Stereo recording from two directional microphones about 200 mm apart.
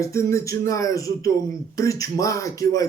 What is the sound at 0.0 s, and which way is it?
Speech, 15° left (ahead or behind).